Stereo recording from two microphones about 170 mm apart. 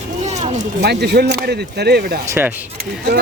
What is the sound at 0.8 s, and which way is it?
Speech, 80° right.